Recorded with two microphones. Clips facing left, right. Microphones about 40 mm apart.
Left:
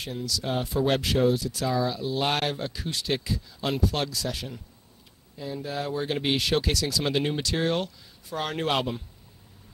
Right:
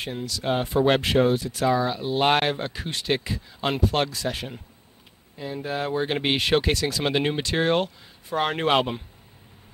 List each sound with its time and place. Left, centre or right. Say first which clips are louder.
0.0 s speech: right 2 dB; right